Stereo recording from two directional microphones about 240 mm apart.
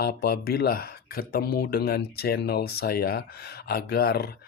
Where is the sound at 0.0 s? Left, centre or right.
Left.